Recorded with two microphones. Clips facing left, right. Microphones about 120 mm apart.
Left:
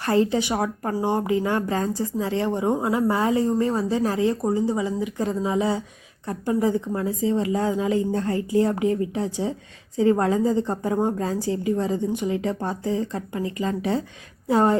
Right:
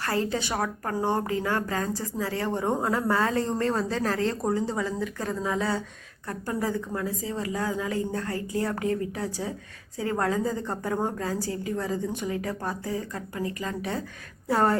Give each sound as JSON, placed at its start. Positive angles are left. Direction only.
{"t": 0.0, "sound": "a woman's voice", "side_deg": 20}